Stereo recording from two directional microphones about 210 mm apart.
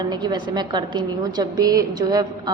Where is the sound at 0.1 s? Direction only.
20° right (ahead or behind).